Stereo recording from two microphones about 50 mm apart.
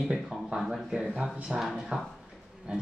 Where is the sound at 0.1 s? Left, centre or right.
Centre.